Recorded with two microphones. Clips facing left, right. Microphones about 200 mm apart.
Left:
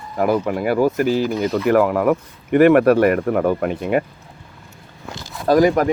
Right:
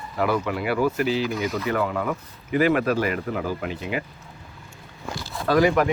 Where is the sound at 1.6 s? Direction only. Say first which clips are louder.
Left 13 dB; 70° left (ahead or behind); by 4.0 s 55° left (ahead or behind).